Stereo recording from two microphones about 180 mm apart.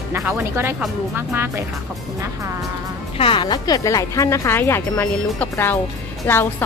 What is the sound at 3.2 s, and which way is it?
Speech, 30° left (ahead or behind).